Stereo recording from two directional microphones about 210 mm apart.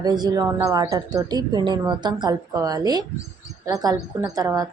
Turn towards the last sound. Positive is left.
turn(degrees=-15)  # may be behind; listen again after turning